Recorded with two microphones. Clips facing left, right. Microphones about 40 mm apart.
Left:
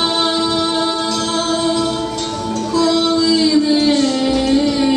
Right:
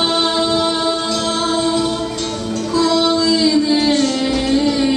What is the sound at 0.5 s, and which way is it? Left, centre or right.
Music, centre.